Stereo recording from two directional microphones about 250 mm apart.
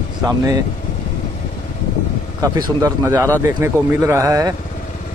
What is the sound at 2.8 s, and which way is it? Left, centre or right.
Speech, centre.